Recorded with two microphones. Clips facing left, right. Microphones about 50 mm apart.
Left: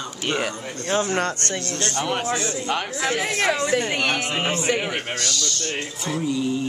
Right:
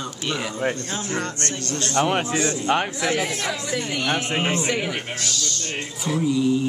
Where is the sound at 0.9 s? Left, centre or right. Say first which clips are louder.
Left 5 dB; left.